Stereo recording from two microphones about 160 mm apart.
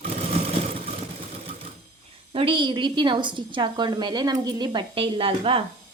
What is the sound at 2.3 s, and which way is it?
A woman's voice, 35° right (ahead or behind).